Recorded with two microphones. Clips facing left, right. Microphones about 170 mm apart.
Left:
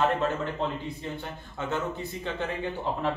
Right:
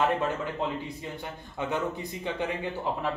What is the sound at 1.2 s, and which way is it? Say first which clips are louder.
Speech: right 1 dB; 15° right (ahead or behind).